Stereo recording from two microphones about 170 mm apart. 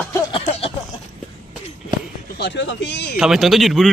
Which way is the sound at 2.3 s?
85° left.